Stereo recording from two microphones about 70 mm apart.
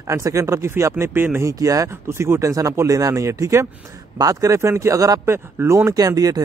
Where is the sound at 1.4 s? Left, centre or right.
Right.